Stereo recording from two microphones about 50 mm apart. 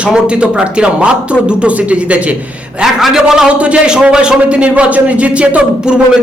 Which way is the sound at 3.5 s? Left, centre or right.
Right.